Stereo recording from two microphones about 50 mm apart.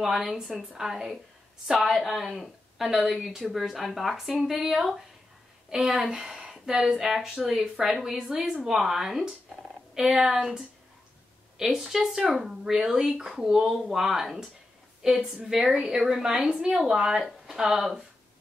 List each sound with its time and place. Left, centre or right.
0.0 s a woman's voice: centre
8.2 s a woman's voice: centre